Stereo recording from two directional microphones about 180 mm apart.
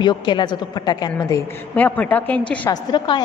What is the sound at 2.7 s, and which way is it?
Speech, 25° left (ahead or behind).